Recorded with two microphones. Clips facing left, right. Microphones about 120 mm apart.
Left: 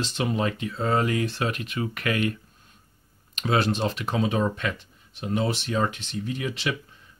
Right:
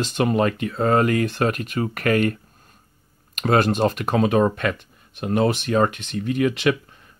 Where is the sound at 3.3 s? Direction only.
50° right (ahead or behind).